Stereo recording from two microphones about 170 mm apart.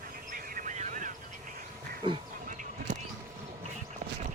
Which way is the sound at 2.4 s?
50° right (ahead or behind).